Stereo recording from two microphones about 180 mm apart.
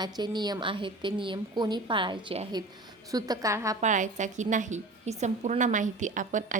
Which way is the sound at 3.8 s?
45° right (ahead or behind).